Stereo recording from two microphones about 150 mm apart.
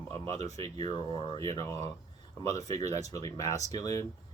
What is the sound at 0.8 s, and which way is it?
Speech, 35° left (ahead or behind).